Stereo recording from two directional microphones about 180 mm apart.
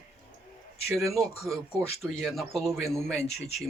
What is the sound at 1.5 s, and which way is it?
Speech, 5° right (ahead or behind).